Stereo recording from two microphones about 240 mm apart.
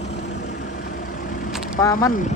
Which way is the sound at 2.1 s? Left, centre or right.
Left.